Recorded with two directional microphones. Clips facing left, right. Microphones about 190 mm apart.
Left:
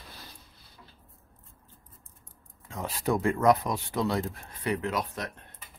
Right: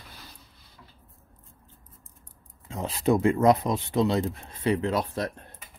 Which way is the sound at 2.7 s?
20° right (ahead or behind).